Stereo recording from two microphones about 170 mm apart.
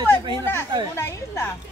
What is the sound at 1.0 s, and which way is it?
Speech, 15° left (ahead or behind).